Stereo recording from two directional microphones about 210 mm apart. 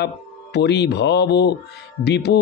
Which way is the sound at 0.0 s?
55° left (ahead or behind).